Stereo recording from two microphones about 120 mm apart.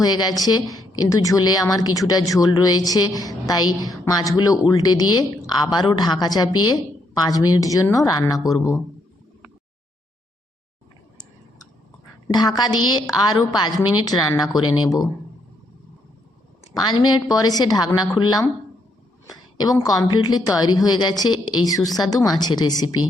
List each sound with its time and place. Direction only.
0.0 s a woman's voice: 35° left (ahead or behind)
12.3 s a woman's voice: 35° left (ahead or behind)
16.7 s a woman's voice: 35° left (ahead or behind)